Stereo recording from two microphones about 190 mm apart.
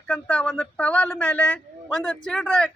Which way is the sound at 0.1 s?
5° left (ahead or behind).